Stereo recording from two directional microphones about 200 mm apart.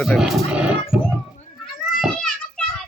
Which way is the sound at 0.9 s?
5° right (ahead or behind).